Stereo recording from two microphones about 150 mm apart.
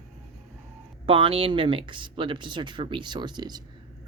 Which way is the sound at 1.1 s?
40° right (ahead or behind).